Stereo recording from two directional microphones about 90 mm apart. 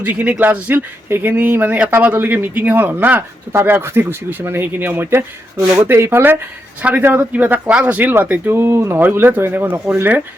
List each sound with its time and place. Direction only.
0.0 s speech: 15° right (ahead or behind)